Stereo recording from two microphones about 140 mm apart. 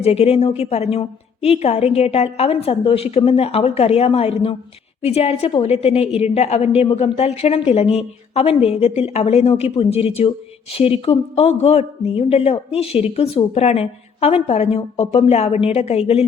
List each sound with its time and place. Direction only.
0.0 s a woman's voice: 45° left (ahead or behind)